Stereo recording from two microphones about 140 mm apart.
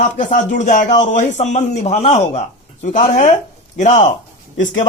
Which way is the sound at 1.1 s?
60° left (ahead or behind).